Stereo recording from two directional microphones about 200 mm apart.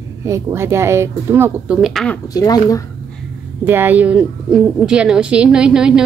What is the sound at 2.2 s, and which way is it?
Speech, 20° left (ahead or behind).